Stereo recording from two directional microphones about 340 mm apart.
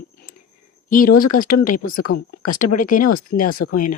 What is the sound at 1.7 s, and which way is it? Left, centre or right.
Speech, left.